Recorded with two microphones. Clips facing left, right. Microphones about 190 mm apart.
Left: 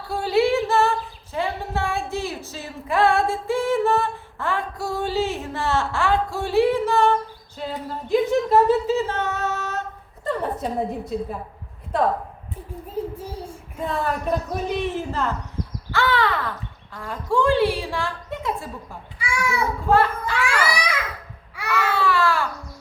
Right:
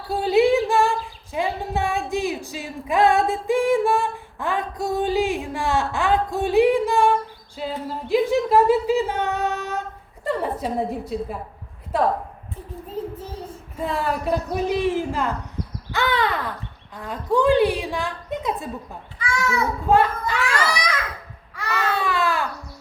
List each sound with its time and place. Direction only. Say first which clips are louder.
0.1 s female singing: right 2 dB; 20° right (ahead or behind)
10.2 s a woman's voice: right 1 dB; 5° right (ahead or behind)
13.1 s child singing: left 1 dB; 10° left (ahead or behind)
13.7 s a woman's voice: right 1 dB; 5° right (ahead or behind)
19.2 s a child's voice: right 1 dB; 10° left (ahead or behind)
20.2 s a sound: even; 10° left (ahead or behind)
21.5 s baby cry: left 2 dB; 10° left (ahead or behind)
21.9 s baby cry: left 3 dB; 20° right (ahead or behind)